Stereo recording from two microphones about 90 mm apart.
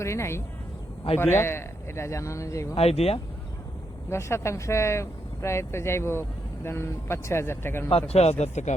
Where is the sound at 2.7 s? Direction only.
90° left.